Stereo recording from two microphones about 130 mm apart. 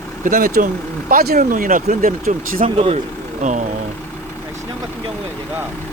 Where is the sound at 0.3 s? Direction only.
90° right.